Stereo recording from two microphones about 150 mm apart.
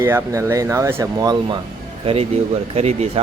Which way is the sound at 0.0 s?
15° right (ahead or behind).